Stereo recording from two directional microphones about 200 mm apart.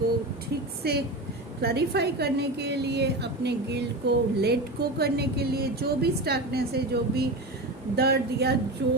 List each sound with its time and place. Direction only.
0.8 s a woman's voice: 55° right (ahead or behind)